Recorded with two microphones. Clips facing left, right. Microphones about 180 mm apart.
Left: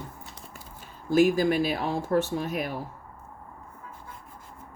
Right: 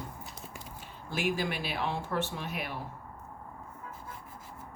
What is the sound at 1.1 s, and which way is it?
A woman's voice, 40° left (ahead or behind).